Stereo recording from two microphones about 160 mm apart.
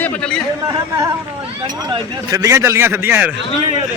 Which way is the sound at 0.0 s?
5° left (ahead or behind).